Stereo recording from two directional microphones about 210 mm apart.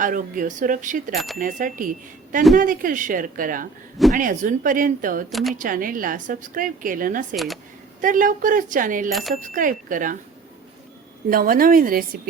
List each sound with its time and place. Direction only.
0.0 s a woman's voice: 40° right (ahead or behind)
5.3 s speech: centre (ahead or behind)
5.5 s a woman's voice: 40° right (ahead or behind)
7.3 s speech: centre (ahead or behind)
8.0 s a woman's voice: 40° right (ahead or behind)
11.3 s a woman's voice: 45° right (ahead or behind)